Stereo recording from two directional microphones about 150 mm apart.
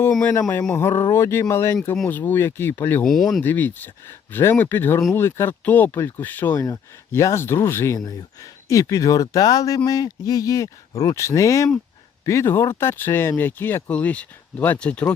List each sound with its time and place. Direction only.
0.3 s speech: 15° left (ahead or behind)
3.1 s speech: centre (ahead or behind)
3.4 s speech: 10° left (ahead or behind)